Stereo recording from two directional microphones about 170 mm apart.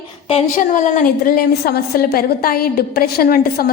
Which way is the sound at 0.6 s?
55° left (ahead or behind).